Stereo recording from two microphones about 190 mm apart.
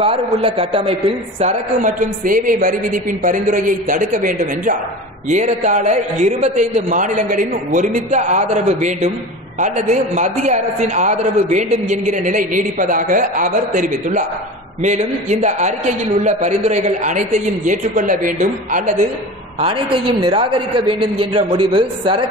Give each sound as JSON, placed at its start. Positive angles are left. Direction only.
{"t": 0.0, "sound": "a man's voice", "side_deg": -30}
{"t": 19.6, "sound": "a man's voice", "side_deg": -25}